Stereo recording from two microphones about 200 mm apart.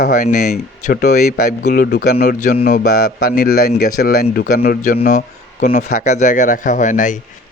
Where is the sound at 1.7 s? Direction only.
50° left (ahead or behind).